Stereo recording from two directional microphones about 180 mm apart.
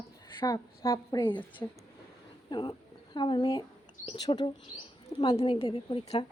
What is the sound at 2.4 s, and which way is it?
A woman's voice, 25° left (ahead or behind).